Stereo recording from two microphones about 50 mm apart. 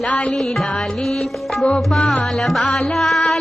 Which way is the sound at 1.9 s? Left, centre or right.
Centre.